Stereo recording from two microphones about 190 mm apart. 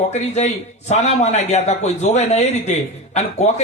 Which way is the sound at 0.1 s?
35° left (ahead or behind).